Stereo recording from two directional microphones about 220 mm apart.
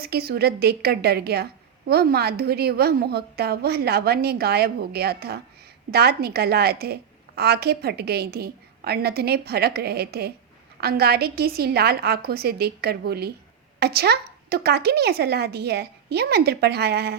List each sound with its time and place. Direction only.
0.0 s a woman's voice: 45° right (ahead or behind)